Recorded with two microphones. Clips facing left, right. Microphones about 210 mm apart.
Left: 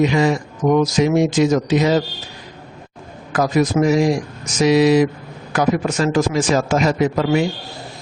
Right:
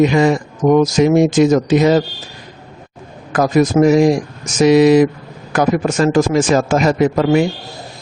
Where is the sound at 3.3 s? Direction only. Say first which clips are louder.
Right 4 dB; 50° right (ahead or behind).